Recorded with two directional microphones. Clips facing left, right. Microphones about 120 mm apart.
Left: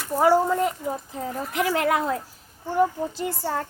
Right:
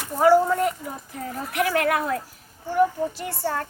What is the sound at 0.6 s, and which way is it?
A woman's voice, 25° left (ahead or behind).